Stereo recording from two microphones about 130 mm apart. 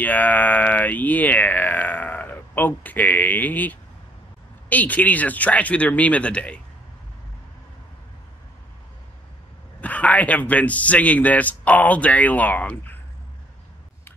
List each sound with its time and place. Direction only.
0.0 s a man's voice: 15° left (ahead or behind)
9.8 s a man's voice: 10° left (ahead or behind)